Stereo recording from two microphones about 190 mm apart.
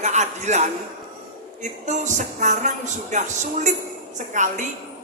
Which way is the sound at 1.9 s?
40° right (ahead or behind).